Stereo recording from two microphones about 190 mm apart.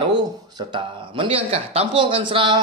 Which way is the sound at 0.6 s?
25° right (ahead or behind).